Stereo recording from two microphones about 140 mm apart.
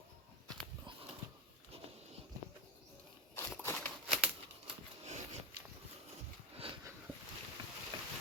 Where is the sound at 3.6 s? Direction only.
15° left (ahead or behind).